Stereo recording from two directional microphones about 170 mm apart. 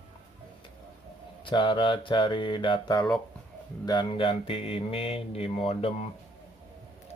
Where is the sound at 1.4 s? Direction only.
30° left (ahead or behind).